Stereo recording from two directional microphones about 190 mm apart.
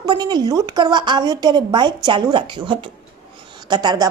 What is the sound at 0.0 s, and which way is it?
A woman's voice, 25° right (ahead or behind).